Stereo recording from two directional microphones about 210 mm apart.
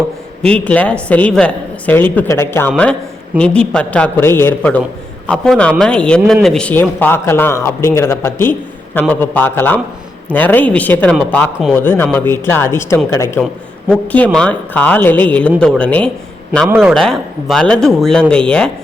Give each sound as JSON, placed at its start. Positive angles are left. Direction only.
{"t": 0.4, "sound": "a man's voice", "side_deg": 5}
{"t": 13.4, "sound": "a man's voice", "side_deg": 0}
{"t": 16.6, "sound": "a man's voice", "side_deg": -5}